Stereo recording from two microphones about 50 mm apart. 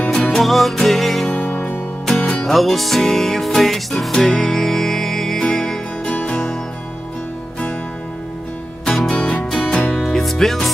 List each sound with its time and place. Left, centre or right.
0.0 s music: centre
1.3 s music: left
2.0 s music: centre
6.1 s music: left
8.8 s music: centre
9.1 s music: centre
9.9 s music: centre